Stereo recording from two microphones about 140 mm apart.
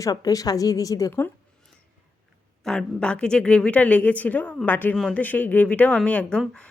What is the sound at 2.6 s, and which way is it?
Speech, 5° left (ahead or behind).